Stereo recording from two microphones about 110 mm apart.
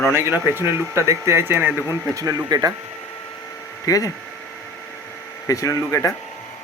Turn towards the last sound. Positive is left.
turn(degrees=30)  # may be behind; listen again after turning